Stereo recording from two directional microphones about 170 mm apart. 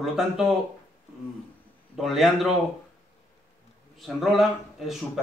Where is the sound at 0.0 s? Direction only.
Centre (ahead or behind).